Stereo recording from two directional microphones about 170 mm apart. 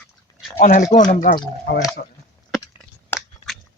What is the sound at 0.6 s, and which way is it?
Speech, 50° left (ahead or behind).